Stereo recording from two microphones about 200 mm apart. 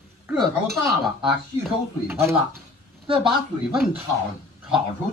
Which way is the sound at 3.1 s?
25° right (ahead or behind).